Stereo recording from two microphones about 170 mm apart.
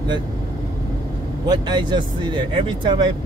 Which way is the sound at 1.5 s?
25° right (ahead or behind).